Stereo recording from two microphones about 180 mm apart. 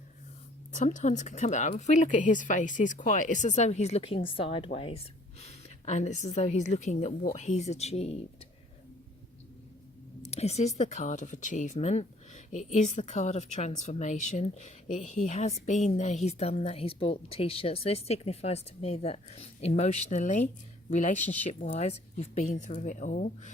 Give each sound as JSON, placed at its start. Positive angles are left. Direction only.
{"t": 0.7, "sound": "speech", "side_deg": 45}
{"t": 10.2, "sound": "a woman's voice", "side_deg": 35}